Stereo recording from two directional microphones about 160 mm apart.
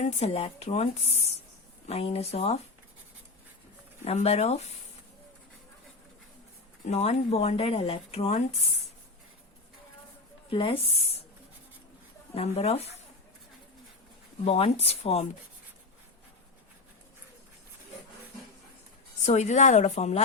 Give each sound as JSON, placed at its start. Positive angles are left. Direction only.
{"t": 0.0, "sound": "speech", "side_deg": 45}
{"t": 4.0, "sound": "speech", "side_deg": 40}
{"t": 6.8, "sound": "speech", "side_deg": 45}
{"t": 10.5, "sound": "speech", "side_deg": 35}
{"t": 12.3, "sound": "speech", "side_deg": 40}
{"t": 14.4, "sound": "speech", "side_deg": 40}
{"t": 19.2, "sound": "speech", "side_deg": 45}